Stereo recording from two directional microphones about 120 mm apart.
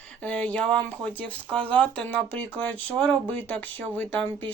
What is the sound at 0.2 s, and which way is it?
Speech, 10° left (ahead or behind).